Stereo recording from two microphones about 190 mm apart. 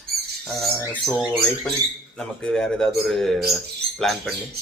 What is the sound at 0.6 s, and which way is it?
Speech, centre (ahead or behind).